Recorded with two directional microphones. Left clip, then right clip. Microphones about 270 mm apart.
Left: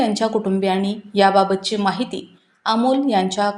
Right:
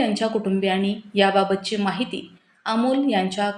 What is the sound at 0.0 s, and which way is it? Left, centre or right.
A woman's voice, centre.